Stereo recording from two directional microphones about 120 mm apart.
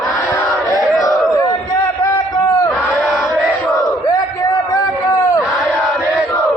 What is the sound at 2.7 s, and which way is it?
Battle cry, centre (ahead or behind).